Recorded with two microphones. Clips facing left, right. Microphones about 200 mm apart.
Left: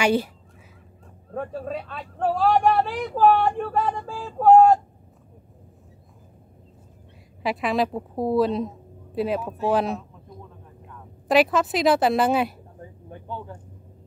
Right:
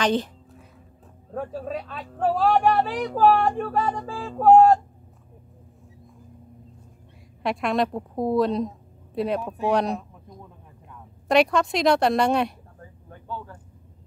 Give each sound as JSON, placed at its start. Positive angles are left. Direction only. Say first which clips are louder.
{"t": 0.0, "sound": "a woman's voice", "louder": "left 2 dB", "side_deg": 10}
{"t": 1.3, "sound": "speech", "louder": "even", "side_deg": 0}
{"t": 7.4, "sound": "a woman's voice", "louder": "even", "side_deg": 0}
{"t": 11.2, "sound": "speech", "louder": "even", "side_deg": 0}